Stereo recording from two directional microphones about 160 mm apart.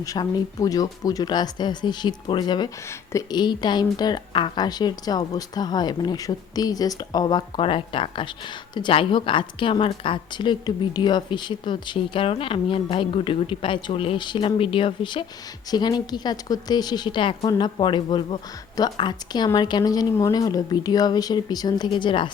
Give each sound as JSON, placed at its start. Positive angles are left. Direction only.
{"t": 0.0, "sound": "a woman's voice", "side_deg": 25}